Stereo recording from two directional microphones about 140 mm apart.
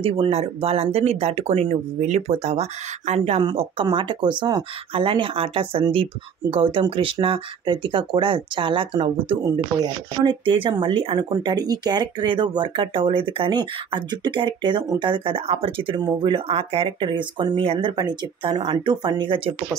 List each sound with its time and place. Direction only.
0.0 s speech: 45° right (ahead or behind)